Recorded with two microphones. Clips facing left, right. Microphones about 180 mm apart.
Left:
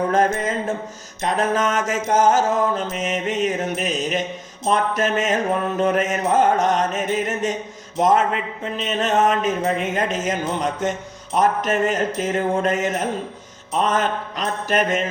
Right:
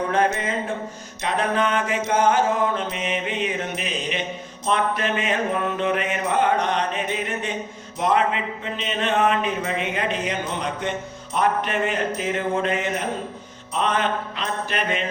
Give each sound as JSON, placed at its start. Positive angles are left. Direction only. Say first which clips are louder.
{"t": 0.1, "sound": "speech", "louder": "left 3 dB", "side_deg": 45}
{"t": 1.2, "sound": "mantra", "louder": "left 2 dB", "side_deg": 45}
{"t": 11.3, "sound": "speech", "louder": "left 3 dB", "side_deg": 40}
{"t": 13.7, "sound": "mantra", "louder": "left 2 dB", "side_deg": 40}